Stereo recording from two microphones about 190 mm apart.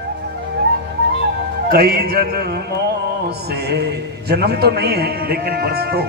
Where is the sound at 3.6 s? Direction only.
60° right (ahead or behind).